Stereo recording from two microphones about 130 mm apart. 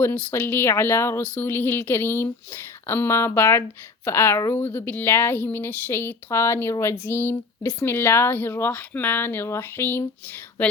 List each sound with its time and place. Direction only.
0.0 s speech: 15° left (ahead or behind)